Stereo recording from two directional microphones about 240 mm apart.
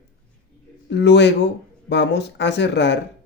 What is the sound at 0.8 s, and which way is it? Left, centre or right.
Speech, left.